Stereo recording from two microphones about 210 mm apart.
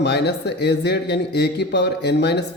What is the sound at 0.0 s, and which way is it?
A man's voice, 55° left (ahead or behind).